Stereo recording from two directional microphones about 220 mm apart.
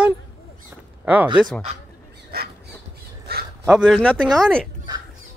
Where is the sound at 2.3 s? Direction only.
45° right (ahead or behind).